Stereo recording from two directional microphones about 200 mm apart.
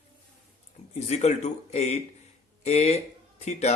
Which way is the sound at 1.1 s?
35° left (ahead or behind).